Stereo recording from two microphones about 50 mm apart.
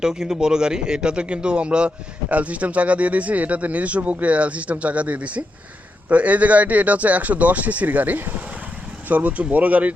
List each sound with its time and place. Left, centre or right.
0.0 s speech: centre; by 9.9 s right